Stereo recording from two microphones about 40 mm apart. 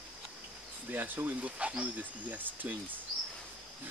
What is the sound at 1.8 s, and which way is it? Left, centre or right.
Speech, right.